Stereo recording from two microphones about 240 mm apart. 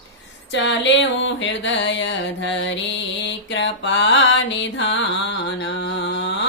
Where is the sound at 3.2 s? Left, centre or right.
Left.